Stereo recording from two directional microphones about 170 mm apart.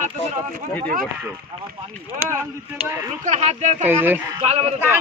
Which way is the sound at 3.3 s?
40° right (ahead or behind).